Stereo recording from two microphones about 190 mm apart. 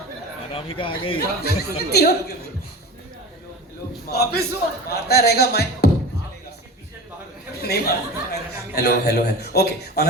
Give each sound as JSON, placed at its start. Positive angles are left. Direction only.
{"t": 0.5, "sound": "speech", "side_deg": 30}
{"t": 1.4, "sound": "speech", "side_deg": 55}
{"t": 4.1, "sound": "speech", "side_deg": 60}
{"t": 7.6, "sound": "speech", "side_deg": 55}